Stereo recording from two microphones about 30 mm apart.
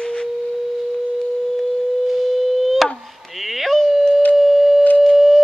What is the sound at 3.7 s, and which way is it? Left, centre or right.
Dog, centre.